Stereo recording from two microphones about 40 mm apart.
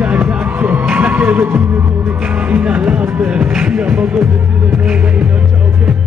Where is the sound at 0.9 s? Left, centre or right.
Right.